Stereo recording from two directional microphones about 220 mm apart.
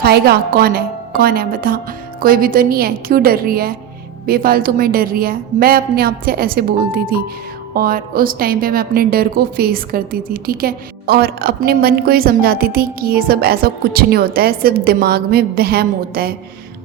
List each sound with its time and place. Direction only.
0.0 s a woman's voice: 45° right (ahead or behind)